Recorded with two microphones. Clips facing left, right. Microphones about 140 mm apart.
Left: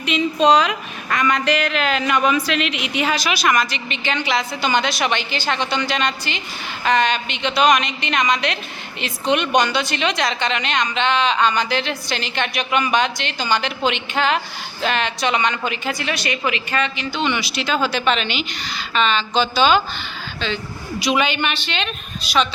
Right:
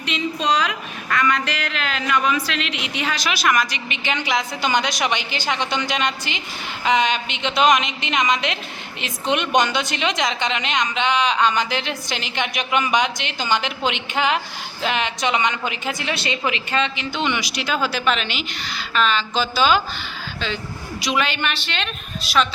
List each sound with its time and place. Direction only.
0.3 s a woman's voice: 25° left (ahead or behind); by 22.4 s centre (ahead or behind)